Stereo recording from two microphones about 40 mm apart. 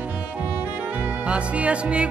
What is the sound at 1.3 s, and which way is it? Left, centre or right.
Music, right.